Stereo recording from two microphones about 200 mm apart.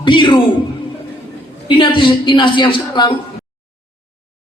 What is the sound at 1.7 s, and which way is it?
A woman's voice, 25° left (ahead or behind).